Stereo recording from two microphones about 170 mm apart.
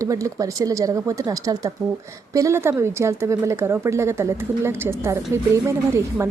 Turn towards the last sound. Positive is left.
turn(degrees=-15)  # may be behind; listen again after turning